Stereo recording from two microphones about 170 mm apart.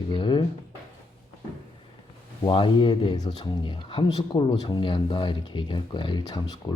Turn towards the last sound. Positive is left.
turn(degrees=25)  # may be behind; listen again after turning